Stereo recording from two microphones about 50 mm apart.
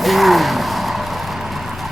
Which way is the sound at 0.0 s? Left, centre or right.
Centre.